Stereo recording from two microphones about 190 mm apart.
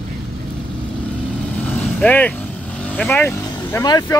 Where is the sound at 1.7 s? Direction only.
5° left (ahead or behind).